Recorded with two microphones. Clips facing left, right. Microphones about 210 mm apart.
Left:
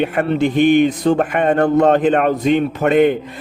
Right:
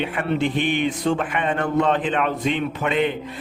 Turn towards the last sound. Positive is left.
turn(degrees=45)  # may be behind; listen again after turning